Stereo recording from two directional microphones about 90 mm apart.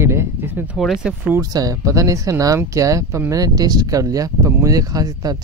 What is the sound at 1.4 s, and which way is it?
Speech, 45° right (ahead or behind).